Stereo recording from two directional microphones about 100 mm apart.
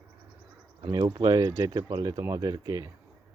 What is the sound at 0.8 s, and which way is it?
Speech, 40° right (ahead or behind).